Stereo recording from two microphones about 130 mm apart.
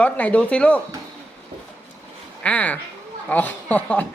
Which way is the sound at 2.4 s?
10° left (ahead or behind).